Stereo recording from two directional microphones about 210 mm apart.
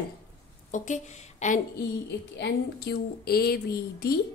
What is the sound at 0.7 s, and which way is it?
Speech, 35° left (ahead or behind).